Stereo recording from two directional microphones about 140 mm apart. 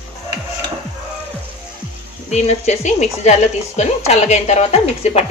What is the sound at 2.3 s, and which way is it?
Speech, 50° left (ahead or behind).